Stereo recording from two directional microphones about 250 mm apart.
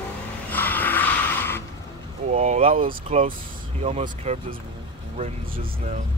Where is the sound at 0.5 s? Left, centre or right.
Centre.